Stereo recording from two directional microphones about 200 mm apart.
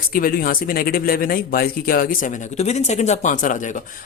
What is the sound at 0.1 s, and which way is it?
Speech, 45° left (ahead or behind).